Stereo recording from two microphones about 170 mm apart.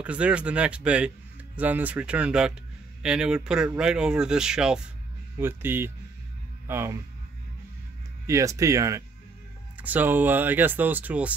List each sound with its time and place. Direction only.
0.0 s speech: 5° right (ahead or behind)
8.3 s speech: 20° right (ahead or behind)